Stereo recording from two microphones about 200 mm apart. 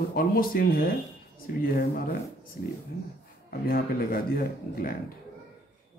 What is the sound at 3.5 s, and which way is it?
Speech, 45° left (ahead or behind).